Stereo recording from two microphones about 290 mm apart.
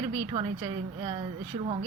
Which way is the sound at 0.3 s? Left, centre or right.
Centre.